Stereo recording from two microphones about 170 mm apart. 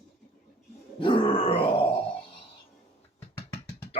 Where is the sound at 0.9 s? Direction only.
30° left (ahead or behind).